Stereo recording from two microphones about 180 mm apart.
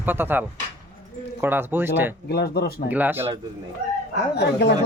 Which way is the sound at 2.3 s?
60° left (ahead or behind).